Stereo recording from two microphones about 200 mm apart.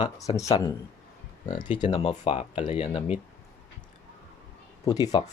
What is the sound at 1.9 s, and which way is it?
Speech, 25° left (ahead or behind).